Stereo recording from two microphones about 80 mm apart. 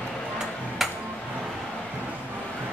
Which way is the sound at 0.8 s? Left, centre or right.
Centre.